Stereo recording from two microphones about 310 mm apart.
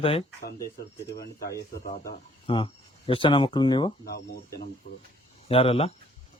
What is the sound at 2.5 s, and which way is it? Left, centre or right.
Speech, centre.